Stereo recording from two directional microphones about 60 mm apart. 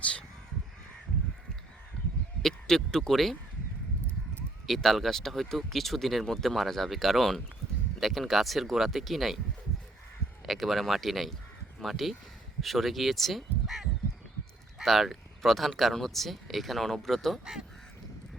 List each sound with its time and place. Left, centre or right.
0.0 s speech: centre
2.4 s speech: centre
4.6 s speech: centre
10.4 s speech: centre